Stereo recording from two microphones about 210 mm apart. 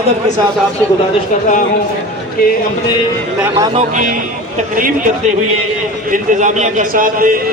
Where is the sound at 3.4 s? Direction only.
15° right (ahead or behind).